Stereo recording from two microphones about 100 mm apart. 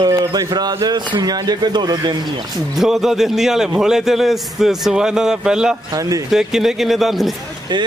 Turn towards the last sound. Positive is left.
turn(degrees=-50)  # may be behind; listen again after turning